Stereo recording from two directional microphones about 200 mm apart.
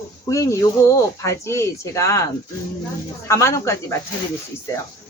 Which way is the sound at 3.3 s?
15° left (ahead or behind).